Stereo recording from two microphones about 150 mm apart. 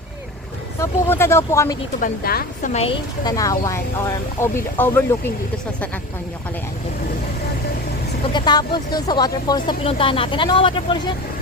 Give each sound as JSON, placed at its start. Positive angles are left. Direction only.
{"t": 0.8, "sound": "speech", "side_deg": 15}
{"t": 2.0, "sound": "a woman's voice", "side_deg": 75}
{"t": 2.7, "sound": "speech", "side_deg": 40}
{"t": 3.2, "sound": "speech", "side_deg": 25}
{"t": 8.3, "sound": "speech", "side_deg": 30}